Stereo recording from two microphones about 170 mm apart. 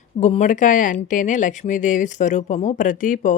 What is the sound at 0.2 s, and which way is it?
Speech, 40° left (ahead or behind).